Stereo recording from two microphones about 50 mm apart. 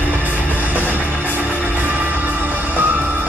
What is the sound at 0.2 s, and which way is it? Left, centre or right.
Music, right.